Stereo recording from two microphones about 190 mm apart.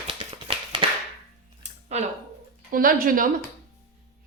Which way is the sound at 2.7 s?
45° right (ahead or behind).